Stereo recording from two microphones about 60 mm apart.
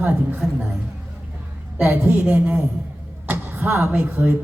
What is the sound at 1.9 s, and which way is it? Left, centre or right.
Speech, right.